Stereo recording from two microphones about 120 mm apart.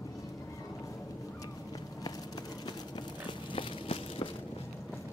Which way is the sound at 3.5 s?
50° left (ahead or behind).